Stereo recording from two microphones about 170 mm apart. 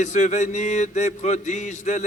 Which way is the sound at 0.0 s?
45° left (ahead or behind).